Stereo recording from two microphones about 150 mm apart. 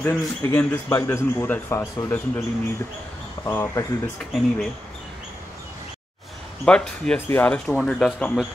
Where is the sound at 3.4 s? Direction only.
15° left (ahead or behind).